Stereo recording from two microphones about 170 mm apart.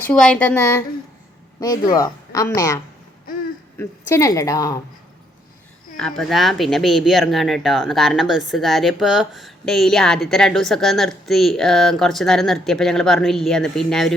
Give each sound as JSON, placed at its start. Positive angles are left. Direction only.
{"t": 0.1, "sound": "a woman's voice", "side_deg": 5}
{"t": 6.0, "sound": "speech", "side_deg": 5}